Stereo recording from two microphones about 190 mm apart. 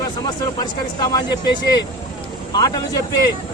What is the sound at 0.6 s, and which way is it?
Speech, 20° left (ahead or behind).